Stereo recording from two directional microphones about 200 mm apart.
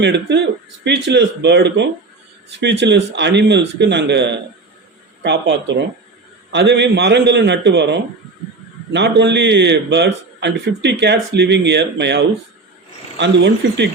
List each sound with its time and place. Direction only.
0.0 s a man's voice: 60° right (ahead or behind)